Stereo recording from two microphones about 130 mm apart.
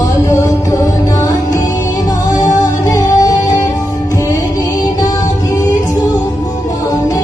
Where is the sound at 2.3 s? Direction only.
30° left (ahead or behind).